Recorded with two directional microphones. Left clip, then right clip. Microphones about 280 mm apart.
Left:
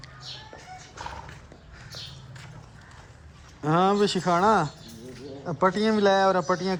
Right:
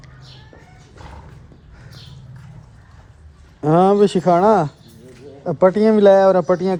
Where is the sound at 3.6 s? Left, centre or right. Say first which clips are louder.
Right 9 dB; centre.